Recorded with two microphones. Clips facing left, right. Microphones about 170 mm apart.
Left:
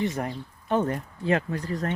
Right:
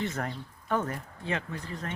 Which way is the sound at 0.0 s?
15° left (ahead or behind).